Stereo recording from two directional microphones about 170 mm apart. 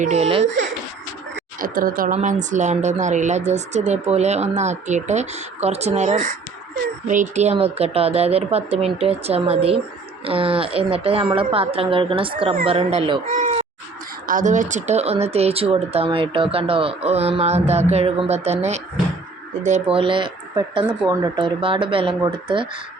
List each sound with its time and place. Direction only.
0.0 s speech: 40° right (ahead or behind)
1.5 s speech: 55° right (ahead or behind); by 22.8 s 30° right (ahead or behind)